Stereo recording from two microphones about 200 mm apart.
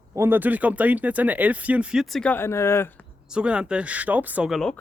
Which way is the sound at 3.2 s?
5° right (ahead or behind).